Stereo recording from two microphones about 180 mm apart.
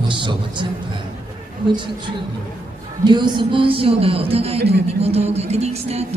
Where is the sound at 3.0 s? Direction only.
25° right (ahead or behind).